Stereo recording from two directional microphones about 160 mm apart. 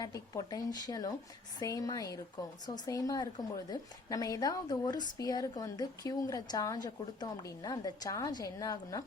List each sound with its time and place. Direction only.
0.0 s a woman's voice: 20° left (ahead or behind)